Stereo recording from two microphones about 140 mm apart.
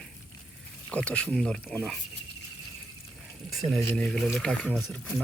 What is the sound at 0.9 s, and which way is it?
Speech, 10° left (ahead or behind).